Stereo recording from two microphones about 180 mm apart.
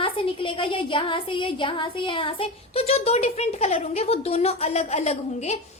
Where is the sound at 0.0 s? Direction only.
30° left (ahead or behind).